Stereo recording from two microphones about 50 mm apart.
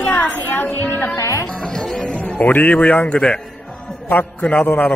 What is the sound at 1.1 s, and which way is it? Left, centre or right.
Speech, left.